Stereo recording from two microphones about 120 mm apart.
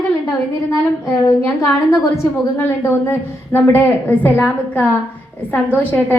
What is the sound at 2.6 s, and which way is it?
A woman's voice, 20° left (ahead or behind).